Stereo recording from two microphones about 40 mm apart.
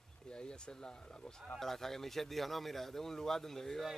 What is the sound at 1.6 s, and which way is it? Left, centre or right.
Speech, centre.